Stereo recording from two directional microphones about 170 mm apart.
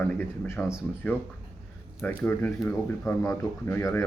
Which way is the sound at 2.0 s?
10° left (ahead or behind).